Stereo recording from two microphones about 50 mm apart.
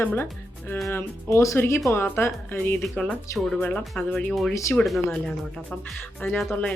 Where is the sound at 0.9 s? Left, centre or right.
Left.